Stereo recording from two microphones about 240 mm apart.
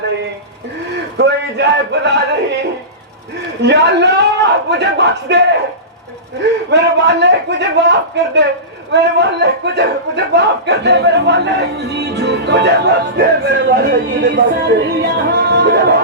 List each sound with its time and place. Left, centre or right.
1.1 s a man's voice: right
3.6 s a man's voice: right
6.7 s a man's voice: right